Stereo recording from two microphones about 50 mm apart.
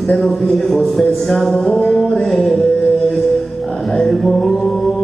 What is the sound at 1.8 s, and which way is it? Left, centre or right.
Music, centre.